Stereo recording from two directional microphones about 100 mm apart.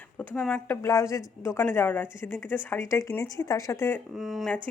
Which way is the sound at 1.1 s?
30° left (ahead or behind).